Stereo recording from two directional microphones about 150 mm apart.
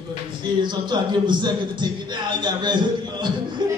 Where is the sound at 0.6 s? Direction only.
30° right (ahead or behind).